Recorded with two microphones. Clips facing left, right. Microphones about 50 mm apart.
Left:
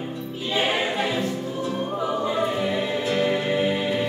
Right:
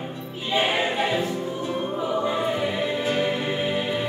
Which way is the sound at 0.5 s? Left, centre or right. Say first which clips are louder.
Right 1 dB; centre.